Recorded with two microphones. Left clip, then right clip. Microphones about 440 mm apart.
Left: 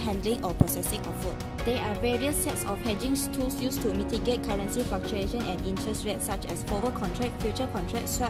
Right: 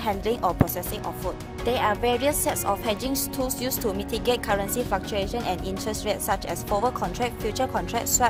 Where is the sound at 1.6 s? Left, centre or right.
Centre.